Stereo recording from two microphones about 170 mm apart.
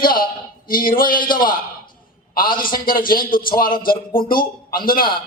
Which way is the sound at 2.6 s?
55° left (ahead or behind).